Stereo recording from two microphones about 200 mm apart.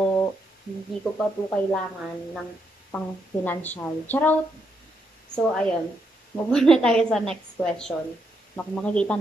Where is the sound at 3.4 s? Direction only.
10° left (ahead or behind).